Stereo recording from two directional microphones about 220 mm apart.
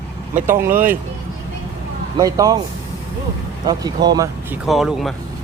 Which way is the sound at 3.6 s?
20° right (ahead or behind).